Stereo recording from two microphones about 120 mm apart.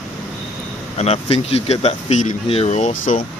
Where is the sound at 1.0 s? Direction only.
60° left (ahead or behind); by 2.3 s 80° left.